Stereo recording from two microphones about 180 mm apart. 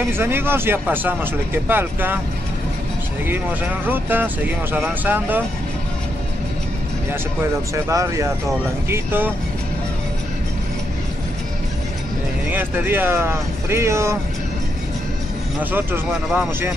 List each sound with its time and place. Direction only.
0.1 s speech: 15° right (ahead or behind)
3.8 s speech: 10° right (ahead or behind)
7.7 s speech: 15° right (ahead or behind)
12.4 s speech: 10° right (ahead or behind)
15.7 s speech: 10° right (ahead or behind)